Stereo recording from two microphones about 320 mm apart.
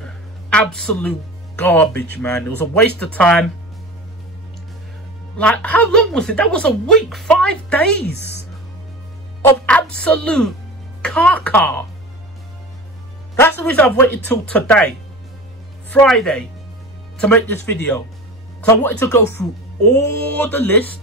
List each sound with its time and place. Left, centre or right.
0.0 s a sound: centre
1.6 s a woman's voice: centre
5.4 s a woman's voice: centre
8.1 s a woman's voice: left
9.7 s a woman's voice: centre
13.4 s a woman's voice: centre
15.9 s a woman's voice: centre